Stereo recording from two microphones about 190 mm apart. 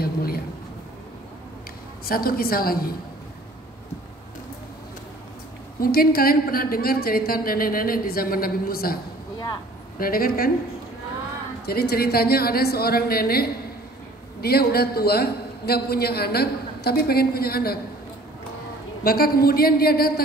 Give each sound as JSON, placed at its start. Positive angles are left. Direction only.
{"t": 0.0, "sound": "a sound", "side_deg": 55}
{"t": 2.0, "sound": "a woman's voice", "side_deg": 50}
{"t": 5.8, "sound": "a woman's voice", "side_deg": 50}
{"t": 9.9, "sound": "a woman's voice", "side_deg": 50}
{"t": 11.6, "sound": "a woman's voice", "side_deg": 55}
{"t": 19.0, "sound": "a woman's voice", "side_deg": 50}